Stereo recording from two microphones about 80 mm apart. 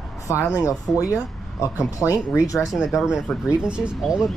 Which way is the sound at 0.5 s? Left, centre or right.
Left.